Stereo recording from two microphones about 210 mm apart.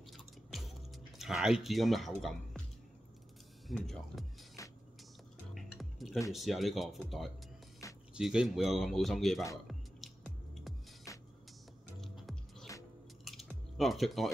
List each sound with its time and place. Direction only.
0.5 s music: centre (ahead or behind)
1.1 s speech: centre (ahead or behind)
3.6 s speech: centre (ahead or behind)
4.6 s music: 15° left (ahead or behind)
5.5 s music: centre (ahead or behind)
6.3 s speech: centre (ahead or behind)
9.7 s music: centre (ahead or behind)
11.1 s music: 15° left (ahead or behind)
12.0 s music: centre (ahead or behind)
13.2 s drip: centre (ahead or behind)